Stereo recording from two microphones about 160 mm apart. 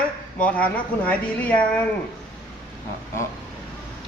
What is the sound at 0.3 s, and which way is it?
Speech, 10° left (ahead or behind).